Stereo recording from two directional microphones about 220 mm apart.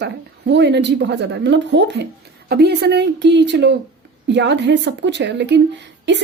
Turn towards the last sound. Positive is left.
turn(degrees=-50)  # may be behind; listen again after turning